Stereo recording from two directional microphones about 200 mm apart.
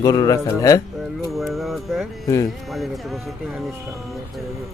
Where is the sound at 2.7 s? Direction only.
Centre (ahead or behind).